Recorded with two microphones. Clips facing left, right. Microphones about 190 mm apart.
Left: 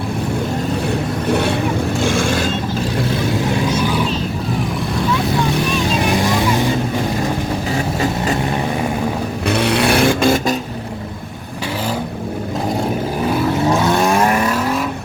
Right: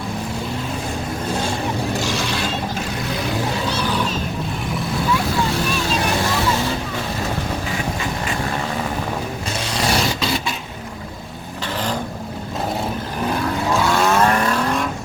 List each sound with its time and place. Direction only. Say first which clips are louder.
1.3 s vehicle: left 7 dB; 65° left (ahead or behind)
2.0 s vehicle: left 6 dB; 50° left (ahead or behind)
9.5 s vehicle: left 8 dB; 60° left (ahead or behind); by 10.5 s 45° left (ahead or behind)
13.7 s vehicle: left 1 dB; 20° left (ahead or behind)